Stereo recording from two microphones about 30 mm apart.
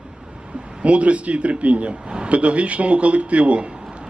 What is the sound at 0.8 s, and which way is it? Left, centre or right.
Speech, right.